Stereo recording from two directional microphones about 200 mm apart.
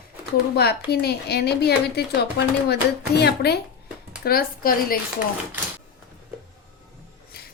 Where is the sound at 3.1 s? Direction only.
55° left (ahead or behind).